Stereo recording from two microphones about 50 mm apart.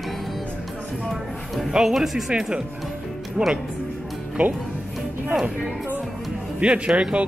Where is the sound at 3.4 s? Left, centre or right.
Right.